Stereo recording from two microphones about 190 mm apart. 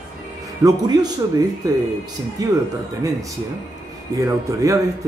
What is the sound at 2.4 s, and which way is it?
Speech, 20° right (ahead or behind).